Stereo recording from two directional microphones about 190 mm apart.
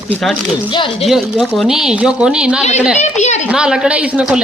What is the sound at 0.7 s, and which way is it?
Speech, 25° left (ahead or behind).